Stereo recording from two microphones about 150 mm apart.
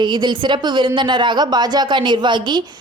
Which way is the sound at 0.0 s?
30° right (ahead or behind).